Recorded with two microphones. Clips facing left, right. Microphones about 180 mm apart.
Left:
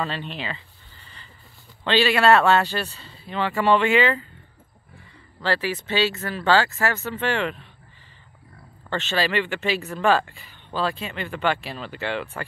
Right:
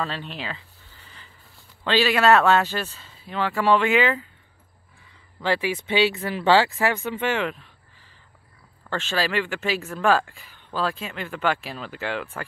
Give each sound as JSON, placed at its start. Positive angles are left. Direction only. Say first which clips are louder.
{"t": 0.0, "sound": "a sound", "louder": "left 1 dB", "side_deg": 0}
{"t": 1.9, "sound": "speech", "louder": "even", "side_deg": 0}
{"t": 5.4, "sound": "speech", "louder": "right 1 dB", "side_deg": -10}
{"t": 7.1, "sound": "speech", "louder": "even", "side_deg": -10}
{"t": 8.9, "sound": "speech", "louder": "left 1 dB", "side_deg": 0}